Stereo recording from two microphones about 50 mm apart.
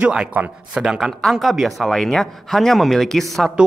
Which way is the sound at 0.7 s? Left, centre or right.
Centre.